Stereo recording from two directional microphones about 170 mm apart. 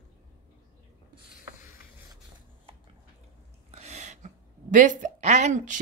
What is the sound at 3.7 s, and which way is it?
A woman's voice, 40° right (ahead or behind).